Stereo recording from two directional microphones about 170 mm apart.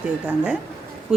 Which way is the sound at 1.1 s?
5° right (ahead or behind).